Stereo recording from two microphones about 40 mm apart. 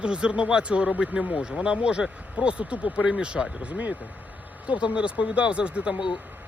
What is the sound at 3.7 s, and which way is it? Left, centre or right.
Speech, right.